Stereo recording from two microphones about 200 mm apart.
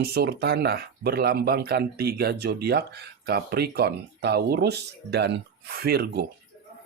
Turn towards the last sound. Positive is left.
turn(degrees=-55)  # may be behind; listen again after turning